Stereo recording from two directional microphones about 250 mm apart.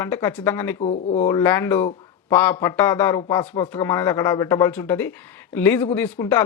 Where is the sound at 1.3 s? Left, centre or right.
Centre.